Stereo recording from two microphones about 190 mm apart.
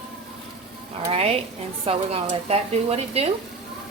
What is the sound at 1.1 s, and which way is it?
A woman's voice, 30° right (ahead or behind).